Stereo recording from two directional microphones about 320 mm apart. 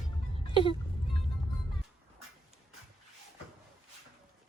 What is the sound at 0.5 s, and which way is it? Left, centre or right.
Speech, centre.